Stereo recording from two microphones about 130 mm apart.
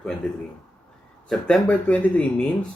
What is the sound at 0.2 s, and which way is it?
Speech, 5° left (ahead or behind).